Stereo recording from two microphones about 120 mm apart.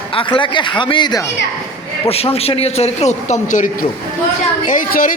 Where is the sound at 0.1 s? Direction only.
45° left (ahead or behind).